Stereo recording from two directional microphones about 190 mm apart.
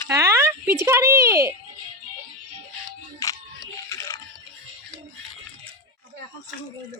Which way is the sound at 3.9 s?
15° left (ahead or behind).